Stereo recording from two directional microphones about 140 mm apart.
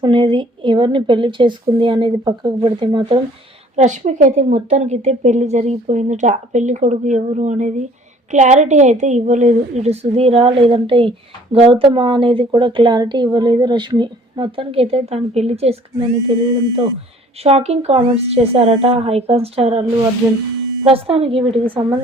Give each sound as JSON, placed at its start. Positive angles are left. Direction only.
{"t": 0.0, "sound": "a woman's voice", "side_deg": -35}
{"t": 3.8, "sound": "a woman's voice", "side_deg": -60}
{"t": 16.1, "sound": "speech", "side_deg": -25}
{"t": 17.4, "sound": "a woman's voice", "side_deg": -50}
{"t": 20.8, "sound": "a woman's voice", "side_deg": -40}